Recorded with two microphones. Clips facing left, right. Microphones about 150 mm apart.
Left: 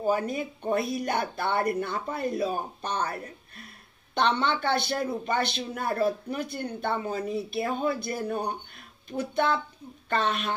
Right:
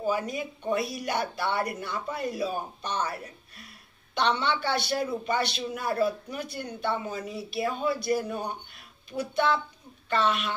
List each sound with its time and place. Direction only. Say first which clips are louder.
0.0 s a woman's voice: left 2 dB; 50° left (ahead or behind)